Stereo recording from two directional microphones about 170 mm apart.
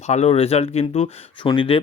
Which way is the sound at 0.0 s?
40° left (ahead or behind).